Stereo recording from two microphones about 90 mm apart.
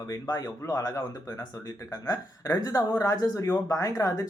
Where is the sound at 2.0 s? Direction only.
40° left (ahead or behind).